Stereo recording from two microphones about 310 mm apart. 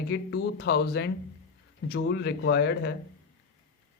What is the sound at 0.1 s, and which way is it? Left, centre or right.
Speech, left.